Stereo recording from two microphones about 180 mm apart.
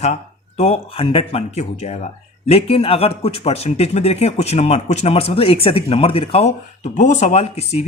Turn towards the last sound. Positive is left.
turn(degrees=35)  # may be behind; listen again after turning